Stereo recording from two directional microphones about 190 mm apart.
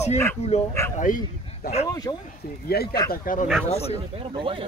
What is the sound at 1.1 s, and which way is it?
Speech, 45° left (ahead or behind).